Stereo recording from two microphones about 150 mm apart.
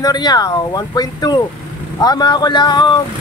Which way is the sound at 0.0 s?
25° left (ahead or behind).